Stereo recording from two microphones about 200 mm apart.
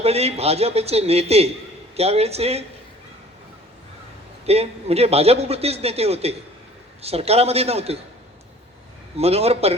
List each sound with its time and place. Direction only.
0.0 s a man's voice: 30° right (ahead or behind)
4.4 s a man's voice: 30° right (ahead or behind)
9.1 s a man's voice: 30° right (ahead or behind)